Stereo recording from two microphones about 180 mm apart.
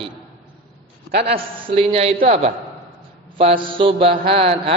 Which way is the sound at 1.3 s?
30° right (ahead or behind).